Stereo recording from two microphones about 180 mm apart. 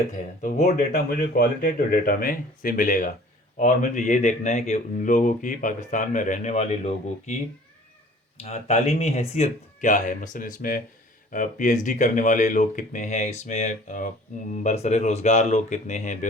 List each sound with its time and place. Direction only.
0.1 s speech: 45° left (ahead or behind)
0.9 s speech: 55° left (ahead or behind); by 7.3 s 35° left (ahead or behind)
8.4 s speech: 35° left (ahead or behind)